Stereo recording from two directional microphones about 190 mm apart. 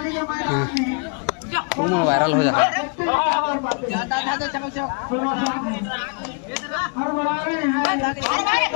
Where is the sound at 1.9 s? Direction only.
Centre (ahead or behind); by 2.7 s 15° left (ahead or behind).